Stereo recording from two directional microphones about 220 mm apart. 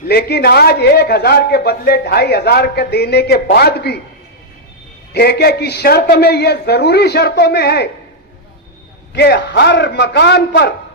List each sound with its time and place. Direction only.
0.1 s a man's voice: 45° left (ahead or behind)
5.1 s a man's voice: 45° left (ahead or behind)
9.1 s a man's voice: 50° left (ahead or behind)